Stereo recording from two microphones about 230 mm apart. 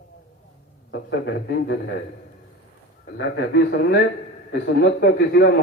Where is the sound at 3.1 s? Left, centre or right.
Left.